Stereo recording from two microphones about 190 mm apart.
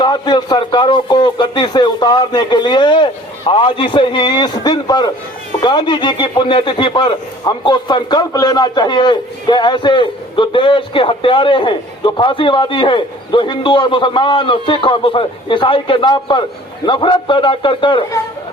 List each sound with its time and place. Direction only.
0.0 s speech: 20° left (ahead or behind)